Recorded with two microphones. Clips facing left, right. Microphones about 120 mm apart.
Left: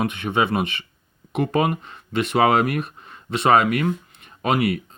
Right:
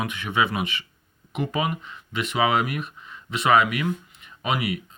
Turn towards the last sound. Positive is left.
turn(degrees=40)  # may be behind; listen again after turning